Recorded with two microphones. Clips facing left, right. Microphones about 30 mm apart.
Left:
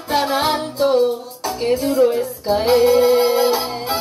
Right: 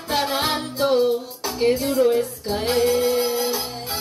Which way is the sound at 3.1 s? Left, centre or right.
Left.